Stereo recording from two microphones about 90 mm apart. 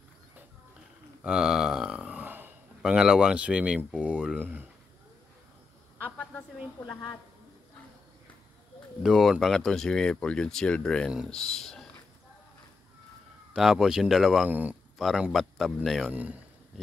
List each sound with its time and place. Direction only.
1.2 s a sound: 10° right (ahead or behind)
2.8 s speech: 10° right (ahead or behind)
4.0 s a sound: 15° right (ahead or behind)
6.0 s a sound: 15° left (ahead or behind)
9.0 s speech: centre (ahead or behind)
13.5 s speech: 5° right (ahead or behind)
14.5 s a man's voice: 20° right (ahead or behind)
15.0 s a man's voice: centre (ahead or behind)
16.1 s speech: 15° right (ahead or behind)